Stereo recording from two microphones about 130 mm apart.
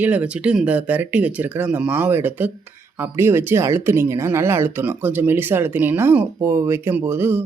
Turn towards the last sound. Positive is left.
turn(degrees=-15)  # may be behind; listen again after turning